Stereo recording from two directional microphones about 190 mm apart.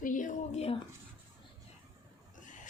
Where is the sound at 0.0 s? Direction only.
45° left (ahead or behind).